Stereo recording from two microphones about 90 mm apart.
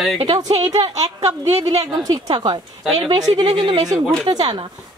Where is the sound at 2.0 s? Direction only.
55° right (ahead or behind).